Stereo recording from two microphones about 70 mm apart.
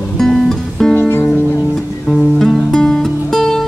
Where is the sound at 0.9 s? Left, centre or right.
Left.